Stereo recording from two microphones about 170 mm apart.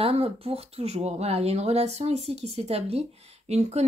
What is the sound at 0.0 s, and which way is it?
Speech, 35° right (ahead or behind).